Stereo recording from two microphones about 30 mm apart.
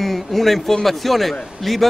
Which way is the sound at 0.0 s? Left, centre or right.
Centre.